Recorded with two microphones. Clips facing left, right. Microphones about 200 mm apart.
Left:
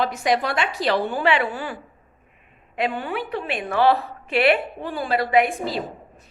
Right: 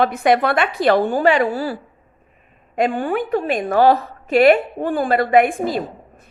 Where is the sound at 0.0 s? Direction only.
55° right (ahead or behind).